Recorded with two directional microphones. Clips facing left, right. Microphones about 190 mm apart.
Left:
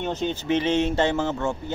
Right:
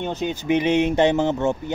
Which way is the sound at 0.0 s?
10° right (ahead or behind).